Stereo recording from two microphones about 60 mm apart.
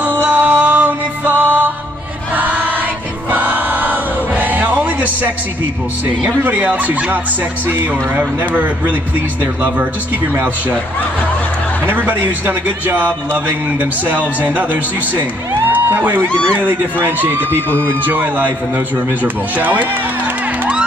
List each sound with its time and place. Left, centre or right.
0.0 s music: right
2.3 s choir: right
6.2 s a man's voice: right
8.2 s a man's voice: right
11.8 s a man's voice: right
16.3 s speech: centre
16.5 s speech: right